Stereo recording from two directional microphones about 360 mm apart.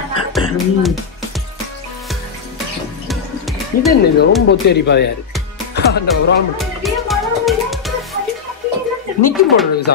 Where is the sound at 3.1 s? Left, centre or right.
Centre.